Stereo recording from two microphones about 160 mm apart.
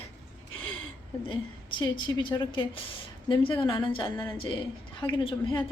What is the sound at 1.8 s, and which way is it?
A woman's voice, 30° left (ahead or behind).